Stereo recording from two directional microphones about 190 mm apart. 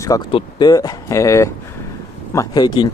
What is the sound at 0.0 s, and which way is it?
Speech, 20° left (ahead or behind).